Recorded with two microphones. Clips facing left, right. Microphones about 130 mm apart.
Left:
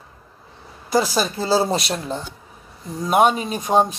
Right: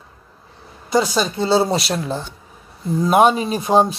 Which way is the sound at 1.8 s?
5° right (ahead or behind).